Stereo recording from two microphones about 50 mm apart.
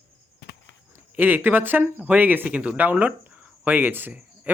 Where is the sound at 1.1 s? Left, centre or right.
Right.